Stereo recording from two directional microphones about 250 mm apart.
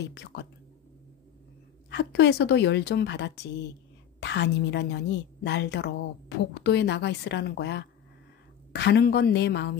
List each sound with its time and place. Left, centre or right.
0.1 s a woman's voice: left
1.9 s a woman's voice: left